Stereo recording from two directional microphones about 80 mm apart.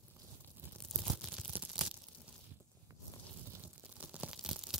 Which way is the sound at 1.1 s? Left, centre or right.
Centre.